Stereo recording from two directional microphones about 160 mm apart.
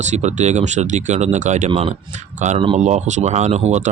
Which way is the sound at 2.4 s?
50° right (ahead or behind).